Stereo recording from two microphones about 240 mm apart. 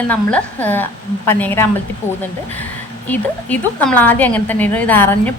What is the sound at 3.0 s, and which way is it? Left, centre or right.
A woman's voice, centre.